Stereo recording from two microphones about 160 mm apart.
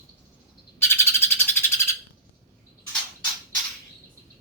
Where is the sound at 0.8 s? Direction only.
15° left (ahead or behind).